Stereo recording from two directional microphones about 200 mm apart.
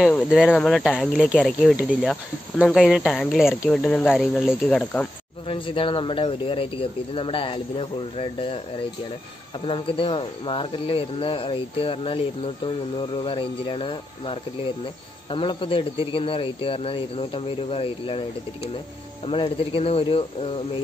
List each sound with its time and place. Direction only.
0.0 s speech: centre (ahead or behind)
5.5 s speech: 25° left (ahead or behind)
9.7 s speech: 25° left (ahead or behind)
19.2 s speech: 30° left (ahead or behind)